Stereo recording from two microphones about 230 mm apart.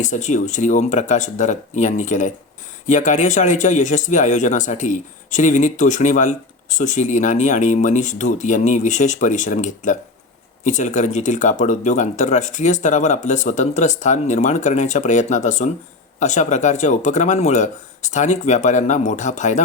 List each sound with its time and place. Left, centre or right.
0.0 s speech: left